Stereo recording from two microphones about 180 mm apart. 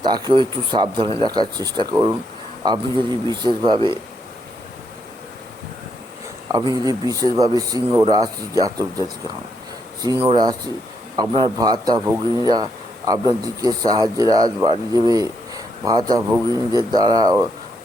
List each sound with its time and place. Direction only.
0.0 s a man's voice: 25° right (ahead or behind)
6.5 s a man's voice: 20° right (ahead or behind)